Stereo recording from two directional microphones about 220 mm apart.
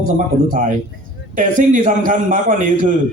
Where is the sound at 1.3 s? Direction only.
40° right (ahead or behind).